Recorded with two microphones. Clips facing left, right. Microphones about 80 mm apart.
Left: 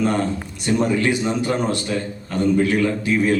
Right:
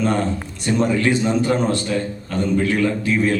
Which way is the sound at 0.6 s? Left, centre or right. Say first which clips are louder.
Right 1 dB; centre.